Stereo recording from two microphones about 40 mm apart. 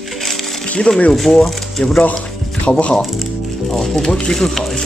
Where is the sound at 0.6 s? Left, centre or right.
Left.